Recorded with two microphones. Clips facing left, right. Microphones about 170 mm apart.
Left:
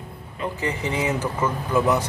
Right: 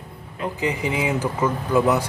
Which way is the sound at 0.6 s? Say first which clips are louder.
Right 2 dB; 15° right (ahead or behind).